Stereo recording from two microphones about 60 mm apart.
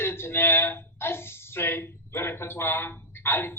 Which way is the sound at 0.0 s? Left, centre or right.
Left.